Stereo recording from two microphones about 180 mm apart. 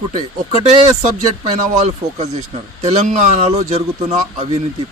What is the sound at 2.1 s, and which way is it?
Speech, 40° right (ahead or behind).